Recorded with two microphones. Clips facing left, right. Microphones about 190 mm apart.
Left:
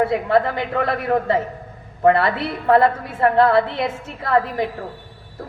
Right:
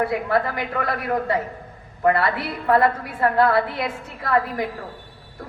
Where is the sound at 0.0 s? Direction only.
25° left (ahead or behind).